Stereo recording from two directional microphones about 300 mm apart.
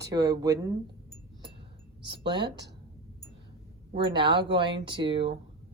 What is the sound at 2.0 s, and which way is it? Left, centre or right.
Speech, centre.